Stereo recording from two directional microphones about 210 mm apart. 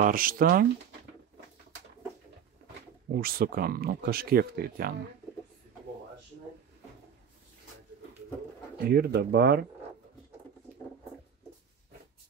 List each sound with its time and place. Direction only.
0.0 s speech: 40° right (ahead or behind)
3.1 s speech: 45° right (ahead or behind)
8.8 s speech: 50° right (ahead or behind)